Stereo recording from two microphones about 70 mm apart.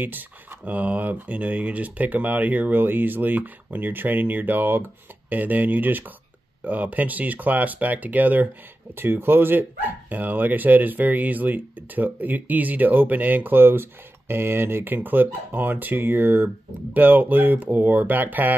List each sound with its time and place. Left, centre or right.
0.7 s speech: right